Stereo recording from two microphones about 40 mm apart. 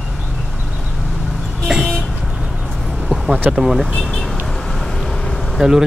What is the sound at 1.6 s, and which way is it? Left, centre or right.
Vehicle, centre.